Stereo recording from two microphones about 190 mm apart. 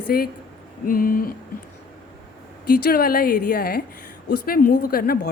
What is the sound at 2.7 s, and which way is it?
A woman's voice, 50° left (ahead or behind).